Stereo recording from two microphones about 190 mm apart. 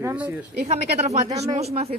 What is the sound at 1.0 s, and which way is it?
Speech, 35° right (ahead or behind).